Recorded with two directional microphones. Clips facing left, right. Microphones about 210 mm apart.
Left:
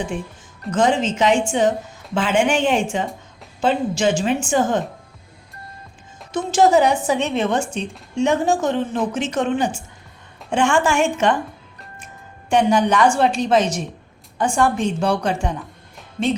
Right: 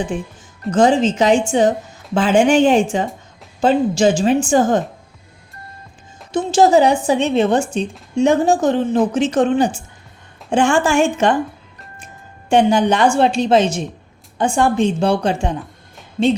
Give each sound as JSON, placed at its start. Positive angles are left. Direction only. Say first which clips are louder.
{"t": 0.7, "sound": "speech", "louder": "right 5 dB", "side_deg": -35}
{"t": 6.3, "sound": "speech", "louder": "right 3 dB", "side_deg": -30}
{"t": 12.5, "sound": "a woman's voice", "louder": "right 3 dB", "side_deg": -30}